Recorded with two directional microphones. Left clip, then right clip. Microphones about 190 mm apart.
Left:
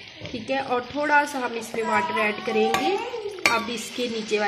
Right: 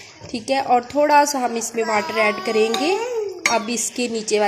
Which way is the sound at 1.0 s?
40° right (ahead or behind).